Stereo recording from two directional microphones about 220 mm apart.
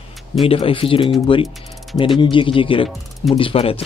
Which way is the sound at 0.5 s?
25° left (ahead or behind).